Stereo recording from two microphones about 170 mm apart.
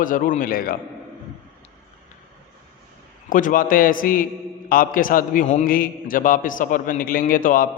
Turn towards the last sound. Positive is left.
turn(degrees=55)  # may be behind; listen again after turning